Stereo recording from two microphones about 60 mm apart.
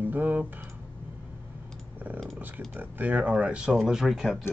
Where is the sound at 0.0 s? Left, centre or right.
Right.